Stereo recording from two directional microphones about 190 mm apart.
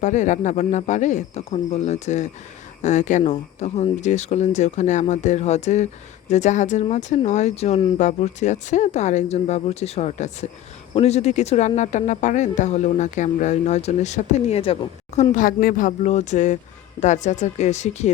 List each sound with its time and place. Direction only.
0.0 s speech: 40° left (ahead or behind)